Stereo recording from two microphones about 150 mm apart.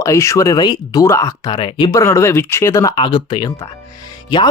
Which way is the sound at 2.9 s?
30° left (ahead or behind).